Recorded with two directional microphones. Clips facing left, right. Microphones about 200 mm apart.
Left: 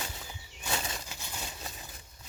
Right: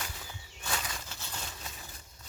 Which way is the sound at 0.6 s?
25° left (ahead or behind).